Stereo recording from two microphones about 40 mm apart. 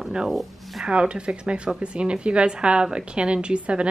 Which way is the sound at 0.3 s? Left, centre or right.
Centre.